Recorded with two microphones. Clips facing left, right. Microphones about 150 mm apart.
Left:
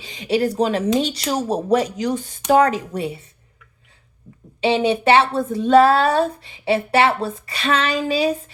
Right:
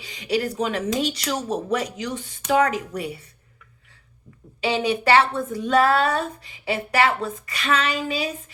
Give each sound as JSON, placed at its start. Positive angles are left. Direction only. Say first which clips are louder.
{"t": 0.0, "sound": "a woman's voice", "louder": "left 5 dB", "side_deg": 25}
{"t": 4.6, "sound": "speech", "louder": "left 5 dB", "side_deg": 25}